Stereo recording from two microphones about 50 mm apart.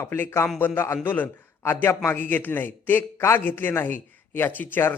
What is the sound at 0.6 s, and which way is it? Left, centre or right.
A man's voice, left.